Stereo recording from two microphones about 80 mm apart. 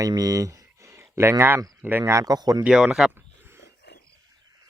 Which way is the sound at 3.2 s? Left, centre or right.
Right.